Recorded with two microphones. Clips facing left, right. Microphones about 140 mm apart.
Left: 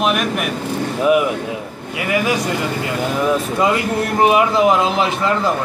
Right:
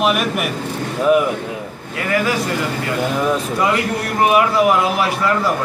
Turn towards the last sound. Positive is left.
turn(degrees=20)  # may be behind; listen again after turning